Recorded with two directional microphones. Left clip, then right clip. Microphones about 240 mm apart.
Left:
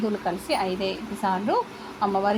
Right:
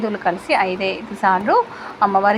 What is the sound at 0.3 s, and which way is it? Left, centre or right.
A woman's voice, centre.